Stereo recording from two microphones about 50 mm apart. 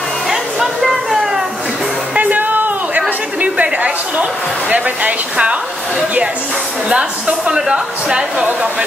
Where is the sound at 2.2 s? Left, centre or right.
Right.